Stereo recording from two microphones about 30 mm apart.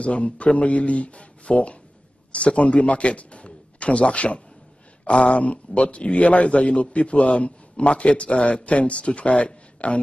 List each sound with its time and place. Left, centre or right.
0.0 s a man's voice: left
9.3 s a man's voice: left
9.8 s speech: left